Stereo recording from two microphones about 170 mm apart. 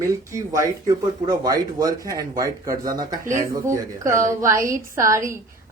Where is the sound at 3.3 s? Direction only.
15° right (ahead or behind).